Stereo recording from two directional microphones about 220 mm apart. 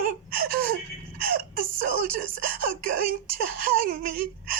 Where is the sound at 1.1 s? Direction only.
40° right (ahead or behind).